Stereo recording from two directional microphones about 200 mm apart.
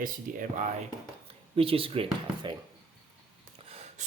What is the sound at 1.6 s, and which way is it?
Speech, 25° right (ahead or behind).